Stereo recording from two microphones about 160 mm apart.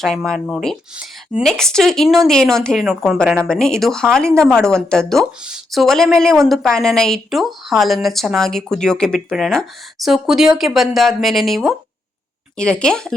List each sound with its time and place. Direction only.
0.0 s a woman's voice: centre (ahead or behind)